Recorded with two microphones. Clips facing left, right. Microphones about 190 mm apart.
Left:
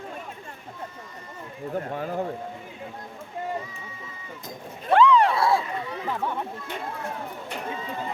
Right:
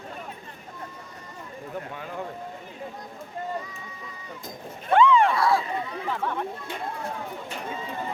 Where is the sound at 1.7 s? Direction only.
45° left (ahead or behind).